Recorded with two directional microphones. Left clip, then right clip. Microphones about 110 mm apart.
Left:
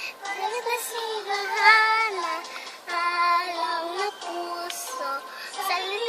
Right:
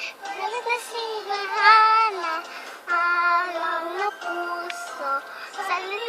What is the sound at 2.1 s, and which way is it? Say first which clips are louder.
Child singing: right 2 dB; centre (ahead or behind).